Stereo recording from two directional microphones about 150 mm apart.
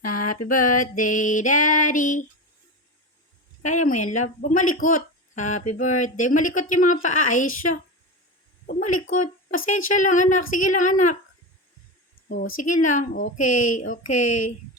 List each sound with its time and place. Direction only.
0.0 s speech: 65° left (ahead or behind)
3.6 s speech: 55° left (ahead or behind)
12.3 s speech: 65° left (ahead or behind)